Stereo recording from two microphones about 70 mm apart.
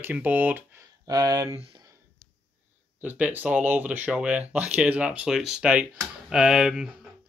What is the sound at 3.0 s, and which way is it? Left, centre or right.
Speech, right.